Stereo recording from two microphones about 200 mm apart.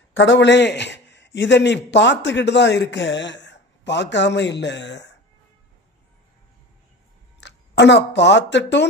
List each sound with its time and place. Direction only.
0.1 s speech: 65° left (ahead or behind)
7.3 s speech: 60° left (ahead or behind)